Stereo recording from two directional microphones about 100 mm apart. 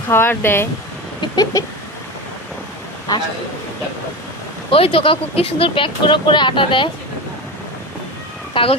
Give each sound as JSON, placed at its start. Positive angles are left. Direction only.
{"t": 0.1, "sound": "speech", "side_deg": 20}
{"t": 1.2, "sound": "a sound", "side_deg": 40}
{"t": 3.1, "sound": "a man's voice", "side_deg": 40}
{"t": 4.7, "sound": "speech", "side_deg": 65}
{"t": 8.6, "sound": "speech", "side_deg": 60}